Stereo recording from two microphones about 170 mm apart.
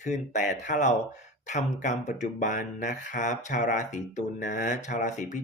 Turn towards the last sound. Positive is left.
turn(degrees=45)  # may be behind; listen again after turning